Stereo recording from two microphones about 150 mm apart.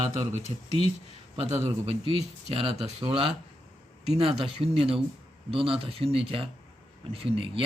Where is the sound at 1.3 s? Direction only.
45° right (ahead or behind).